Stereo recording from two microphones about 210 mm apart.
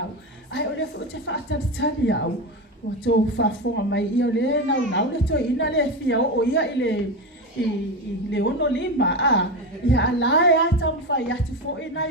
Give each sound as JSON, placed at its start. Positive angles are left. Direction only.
{"t": 0.5, "sound": "a sound", "side_deg": 55}
{"t": 1.3, "sound": "a woman's voice", "side_deg": 60}
{"t": 8.3, "sound": "a woman's voice", "side_deg": 60}